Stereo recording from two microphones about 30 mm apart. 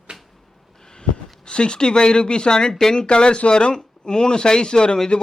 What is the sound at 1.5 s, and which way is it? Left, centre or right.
Speech, left.